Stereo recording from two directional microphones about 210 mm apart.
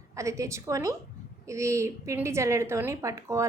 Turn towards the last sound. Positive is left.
turn(degrees=-15)  # may be behind; listen again after turning